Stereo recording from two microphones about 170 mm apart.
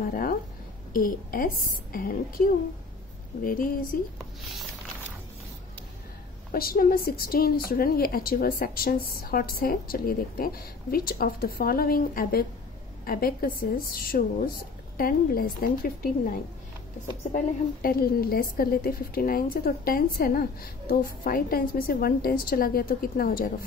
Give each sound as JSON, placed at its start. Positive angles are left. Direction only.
{"t": 0.0, "sound": "a woman's voice", "side_deg": 60}
{"t": 6.5, "sound": "a woman's voice", "side_deg": 60}
{"t": 17.8, "sound": "a woman's voice", "side_deg": 60}